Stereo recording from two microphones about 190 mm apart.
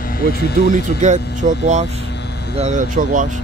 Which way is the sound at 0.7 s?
40° right (ahead or behind).